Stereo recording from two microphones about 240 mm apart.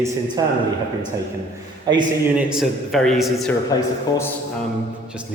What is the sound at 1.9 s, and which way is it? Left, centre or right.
Speech, centre.